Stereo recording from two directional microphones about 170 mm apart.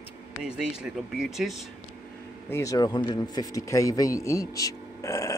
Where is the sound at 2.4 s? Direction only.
15° left (ahead or behind).